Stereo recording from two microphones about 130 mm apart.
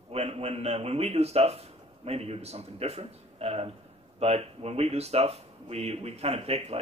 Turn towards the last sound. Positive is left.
turn(degrees=-50)  # may be behind; listen again after turning